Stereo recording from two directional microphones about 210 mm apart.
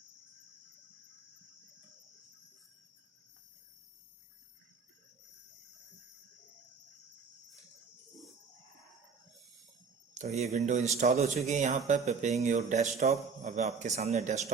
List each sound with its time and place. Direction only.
10.2 s a man's voice: 30° right (ahead or behind)